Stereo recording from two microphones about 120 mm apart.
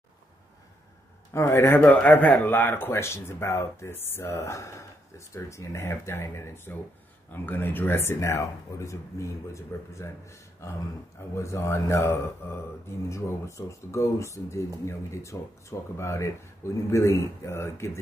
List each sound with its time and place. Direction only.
1.3 s speech: 20° left (ahead or behind)